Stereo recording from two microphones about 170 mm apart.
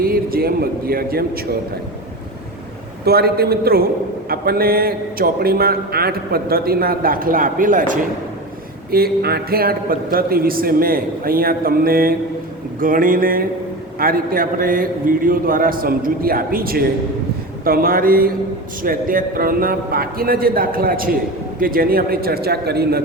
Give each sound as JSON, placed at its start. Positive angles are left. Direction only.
{"t": 0.0, "sound": "a man's voice", "side_deg": -60}
{"t": 3.0, "sound": "a man's voice", "side_deg": -65}
{"t": 8.9, "sound": "a man's voice", "side_deg": -65}